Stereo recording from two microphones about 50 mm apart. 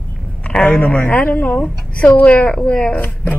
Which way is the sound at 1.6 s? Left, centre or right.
Left.